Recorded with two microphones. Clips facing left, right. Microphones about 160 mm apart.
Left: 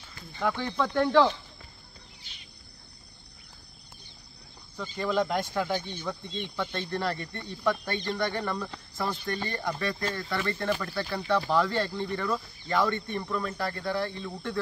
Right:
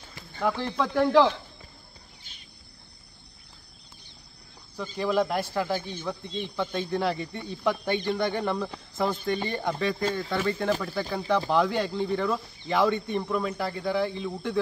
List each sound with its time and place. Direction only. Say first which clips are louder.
0.4 s speech: right 2 dB; 5° right (ahead or behind)
4.9 s speech: right 2 dB; 5° right (ahead or behind)